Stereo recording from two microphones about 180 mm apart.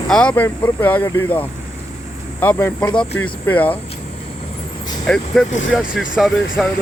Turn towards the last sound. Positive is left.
turn(degrees=0)  # may be behind; listen again after turning